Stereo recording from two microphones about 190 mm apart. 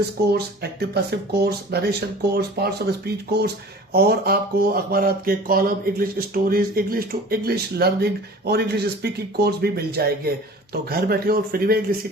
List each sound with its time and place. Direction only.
0.3 s speech: 55° right (ahead or behind)